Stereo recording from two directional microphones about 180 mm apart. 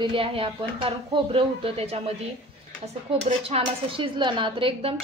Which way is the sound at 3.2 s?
35° right (ahead or behind).